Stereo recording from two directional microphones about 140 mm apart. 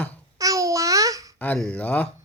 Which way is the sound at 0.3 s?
25° right (ahead or behind).